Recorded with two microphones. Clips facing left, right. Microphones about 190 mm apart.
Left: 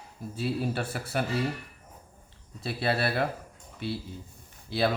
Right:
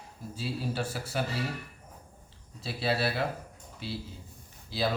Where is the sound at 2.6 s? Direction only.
55° left (ahead or behind).